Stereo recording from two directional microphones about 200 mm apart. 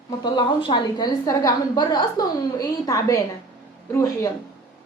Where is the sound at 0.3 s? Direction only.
20° left (ahead or behind).